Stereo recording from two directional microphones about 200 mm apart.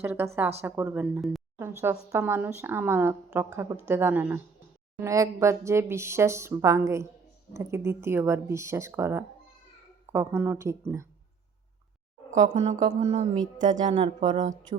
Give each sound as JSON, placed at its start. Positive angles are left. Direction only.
{"t": 0.0, "sound": "a woman's voice", "side_deg": -10}
{"t": 12.3, "sound": "speech", "side_deg": -35}